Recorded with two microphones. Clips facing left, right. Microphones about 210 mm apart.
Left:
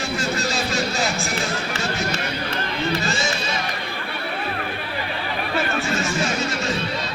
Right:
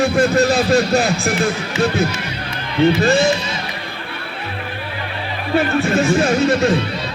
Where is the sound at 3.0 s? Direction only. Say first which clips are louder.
Right 11 dB; 60° right (ahead or behind).